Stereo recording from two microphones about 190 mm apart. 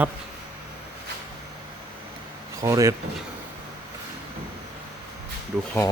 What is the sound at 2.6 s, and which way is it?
Speech, 15° right (ahead or behind).